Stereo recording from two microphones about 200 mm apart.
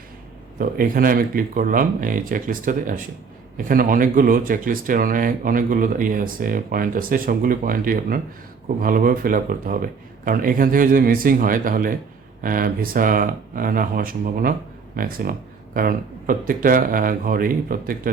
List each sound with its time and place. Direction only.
0.6 s speech: 45° right (ahead or behind)